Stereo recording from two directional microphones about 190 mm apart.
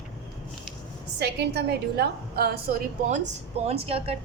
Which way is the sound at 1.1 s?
60° right (ahead or behind).